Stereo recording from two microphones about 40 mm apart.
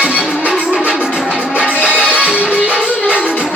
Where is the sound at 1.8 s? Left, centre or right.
Right.